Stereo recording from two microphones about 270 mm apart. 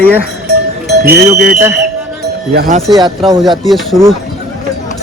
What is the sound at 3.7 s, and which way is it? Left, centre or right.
Speech, centre.